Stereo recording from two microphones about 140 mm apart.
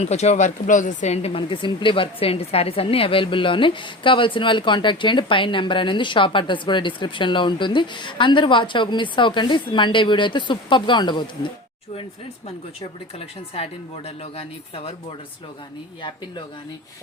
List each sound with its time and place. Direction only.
0.0 s speech: 55° left (ahead or behind); by 11.3 s 35° left (ahead or behind)
13.1 s speech: 45° left (ahead or behind)
16.0 s speech: 35° left (ahead or behind)